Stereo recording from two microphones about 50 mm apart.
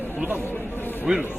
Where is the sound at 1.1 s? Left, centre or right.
Centre.